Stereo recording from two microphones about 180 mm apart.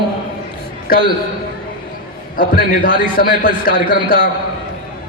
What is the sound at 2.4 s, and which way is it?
A man's voice, 50° left (ahead or behind).